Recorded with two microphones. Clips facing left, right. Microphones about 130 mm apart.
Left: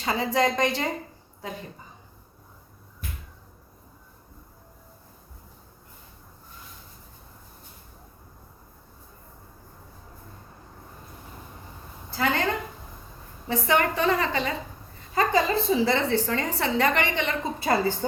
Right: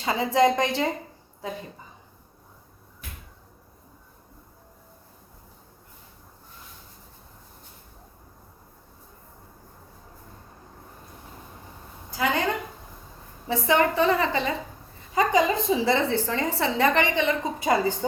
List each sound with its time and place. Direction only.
0.0 s a woman's voice: 25° right (ahead or behind)
12.1 s a sound: 15° right (ahead or behind)
13.7 s a woman's voice: 20° right (ahead or behind)